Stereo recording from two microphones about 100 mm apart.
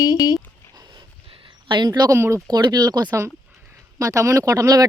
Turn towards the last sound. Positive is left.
turn(degrees=-35)  # may be behind; listen again after turning